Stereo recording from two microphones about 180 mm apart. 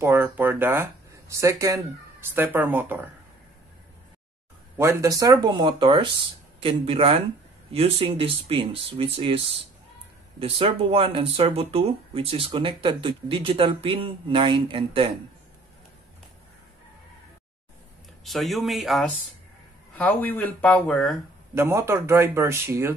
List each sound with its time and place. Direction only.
0.0 s speech: 15° right (ahead or behind)
4.7 s speech: 15° right (ahead or behind)
10.4 s speech: 30° right (ahead or behind)
18.2 s speech: centre (ahead or behind)
21.5 s speech: 15° right (ahead or behind)